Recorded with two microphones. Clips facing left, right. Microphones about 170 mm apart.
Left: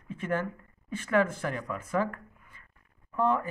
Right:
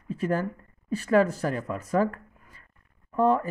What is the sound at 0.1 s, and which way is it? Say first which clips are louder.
Speech: right 4 dB; 35° right (ahead or behind).